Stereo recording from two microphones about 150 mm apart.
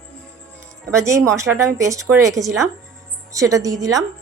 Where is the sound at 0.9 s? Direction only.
20° right (ahead or behind).